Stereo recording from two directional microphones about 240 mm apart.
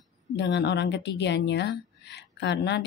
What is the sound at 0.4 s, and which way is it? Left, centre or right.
A woman's voice, left.